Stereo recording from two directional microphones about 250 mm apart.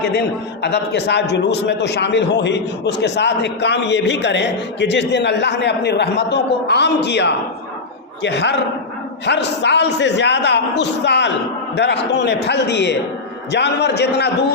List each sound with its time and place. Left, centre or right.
0.6 s a man's voice: left